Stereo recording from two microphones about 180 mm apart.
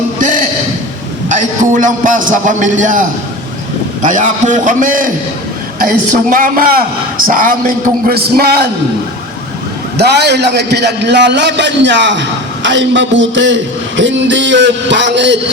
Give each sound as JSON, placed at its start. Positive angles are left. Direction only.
{"t": 0.2, "sound": "a sound", "side_deg": -45}
{"t": 1.3, "sound": "a man's voice", "side_deg": -45}
{"t": 10.0, "sound": "a man's voice", "side_deg": -65}